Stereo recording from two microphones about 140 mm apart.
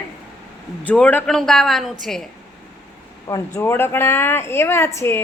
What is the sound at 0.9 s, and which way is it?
A woman's voice, 10° left (ahead or behind).